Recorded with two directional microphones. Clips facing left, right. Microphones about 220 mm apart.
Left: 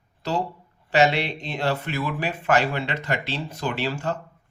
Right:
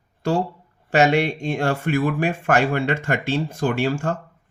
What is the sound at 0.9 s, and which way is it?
Speech, 50° right (ahead or behind).